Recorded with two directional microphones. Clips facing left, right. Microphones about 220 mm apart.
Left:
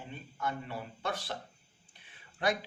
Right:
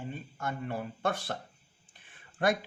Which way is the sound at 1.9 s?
50° right (ahead or behind).